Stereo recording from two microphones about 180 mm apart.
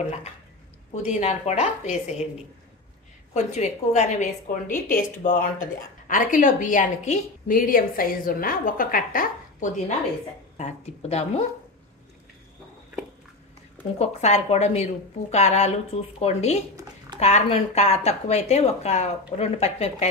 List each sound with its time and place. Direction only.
1.0 s speech: 40° left (ahead or behind)
3.3 s a woman's voice: 40° left (ahead or behind)
13.9 s speech: 35° left (ahead or behind)